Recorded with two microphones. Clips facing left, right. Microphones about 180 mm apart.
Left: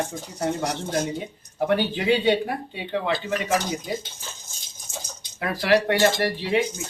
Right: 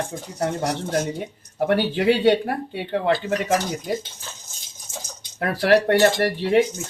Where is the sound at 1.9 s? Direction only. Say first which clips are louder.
Right 4 dB; 60° right (ahead or behind).